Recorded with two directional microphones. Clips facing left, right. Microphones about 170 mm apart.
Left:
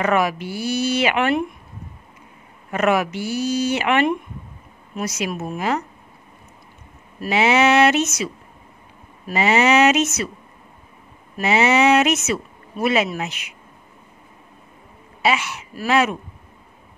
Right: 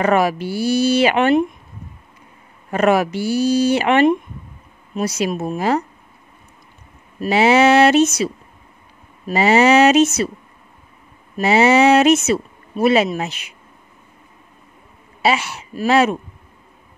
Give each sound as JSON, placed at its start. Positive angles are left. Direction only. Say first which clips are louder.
{"t": 0.0, "sound": "speech", "louder": "right 3 dB", "side_deg": -35}
{"t": 2.7, "sound": "speech", "louder": "right 3 dB", "side_deg": -35}
{"t": 7.2, "sound": "speech", "louder": "right 4 dB", "side_deg": -35}
{"t": 9.3, "sound": "speech", "louder": "right 4 dB", "side_deg": -35}
{"t": 11.4, "sound": "speech", "louder": "right 4 dB", "side_deg": -35}
{"t": 15.2, "sound": "speech", "louder": "right 2 dB", "side_deg": -35}